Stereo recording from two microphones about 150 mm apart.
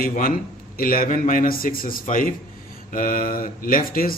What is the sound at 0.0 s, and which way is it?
Speech, 70° left (ahead or behind).